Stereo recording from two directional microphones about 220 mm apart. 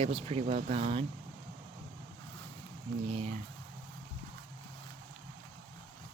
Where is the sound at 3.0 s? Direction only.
30° right (ahead or behind).